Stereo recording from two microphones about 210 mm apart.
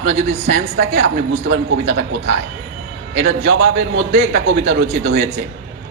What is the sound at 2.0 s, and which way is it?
Speech, 60° right (ahead or behind).